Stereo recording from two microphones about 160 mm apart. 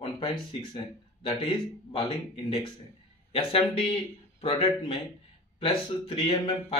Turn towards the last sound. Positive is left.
turn(degrees=35)  # may be behind; listen again after turning